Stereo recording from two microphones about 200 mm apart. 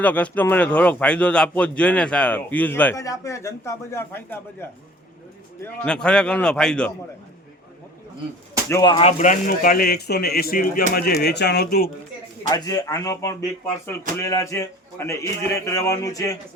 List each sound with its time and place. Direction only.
0.0 s a man's voice: 5° left (ahead or behind)
5.6 s a man's voice: 5° left (ahead or behind)
8.7 s speech: 20° left (ahead or behind)
9.0 s speech: 35° left (ahead or behind)
12.4 s a man's voice: 20° left (ahead or behind)